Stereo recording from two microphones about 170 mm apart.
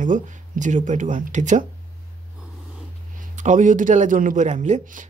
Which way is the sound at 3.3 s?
45° right (ahead or behind).